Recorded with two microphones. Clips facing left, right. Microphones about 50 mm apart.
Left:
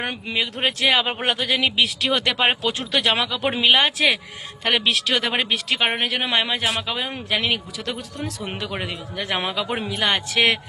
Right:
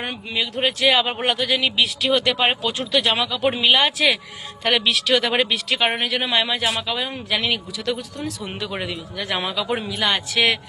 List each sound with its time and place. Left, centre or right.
0.0 s speech: left
1.3 s speech: left
3.4 s a man's voice: left